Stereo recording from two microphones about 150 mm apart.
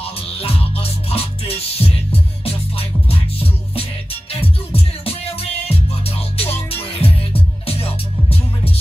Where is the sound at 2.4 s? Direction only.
40° left (ahead or behind).